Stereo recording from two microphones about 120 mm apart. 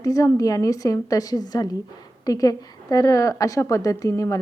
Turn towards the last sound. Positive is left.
turn(degrees=25)  # may be behind; listen again after turning